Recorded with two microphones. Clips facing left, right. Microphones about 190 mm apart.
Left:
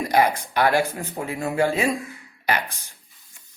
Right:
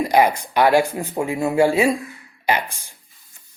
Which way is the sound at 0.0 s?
15° right (ahead or behind).